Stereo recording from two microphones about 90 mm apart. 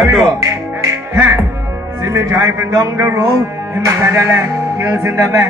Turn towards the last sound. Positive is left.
turn(degrees=-35)  # may be behind; listen again after turning